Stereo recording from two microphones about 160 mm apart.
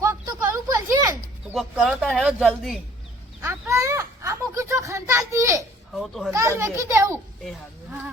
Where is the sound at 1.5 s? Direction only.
5° right (ahead or behind).